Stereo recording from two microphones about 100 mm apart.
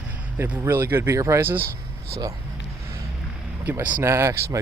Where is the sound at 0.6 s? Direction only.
20° right (ahead or behind).